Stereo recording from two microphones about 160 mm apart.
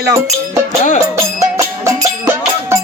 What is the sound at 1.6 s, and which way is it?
Music, 15° right (ahead or behind).